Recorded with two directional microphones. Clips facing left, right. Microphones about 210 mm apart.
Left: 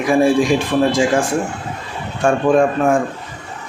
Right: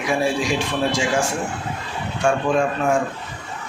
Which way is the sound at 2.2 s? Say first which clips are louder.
Left 6 dB; 55° left (ahead or behind).